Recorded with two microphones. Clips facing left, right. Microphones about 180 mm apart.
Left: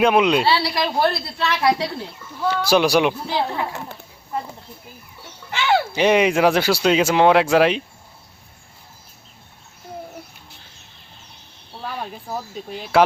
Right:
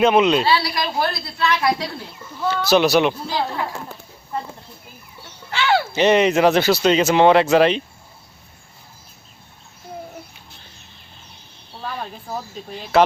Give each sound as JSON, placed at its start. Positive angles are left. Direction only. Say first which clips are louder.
{"t": 0.0, "sound": "speech", "louder": "right 1 dB", "side_deg": 5}
{"t": 0.4, "sound": "a woman's voice", "louder": "even", "side_deg": 30}
{"t": 2.4, "sound": "speech", "louder": "right 1 dB", "side_deg": 10}
{"t": 5.5, "sound": "speech", "louder": "even", "side_deg": 15}
{"t": 11.8, "sound": "speech", "louder": "even", "side_deg": 5}